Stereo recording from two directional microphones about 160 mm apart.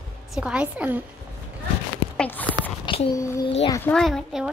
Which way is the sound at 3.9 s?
5° left (ahead or behind).